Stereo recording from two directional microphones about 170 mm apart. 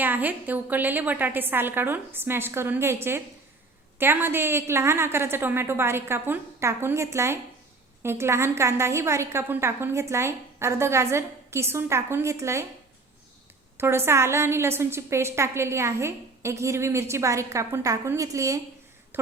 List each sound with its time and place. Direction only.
0.0 s a woman's voice: 10° right (ahead or behind)
13.7 s a woman's voice: 15° right (ahead or behind)